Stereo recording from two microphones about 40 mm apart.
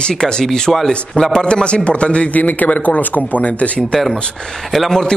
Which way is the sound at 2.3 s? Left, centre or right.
Left.